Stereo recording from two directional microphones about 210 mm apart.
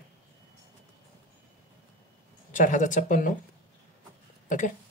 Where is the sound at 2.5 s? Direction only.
35° left (ahead or behind).